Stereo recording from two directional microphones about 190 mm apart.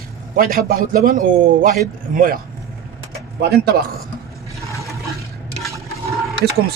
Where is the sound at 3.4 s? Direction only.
55° right (ahead or behind).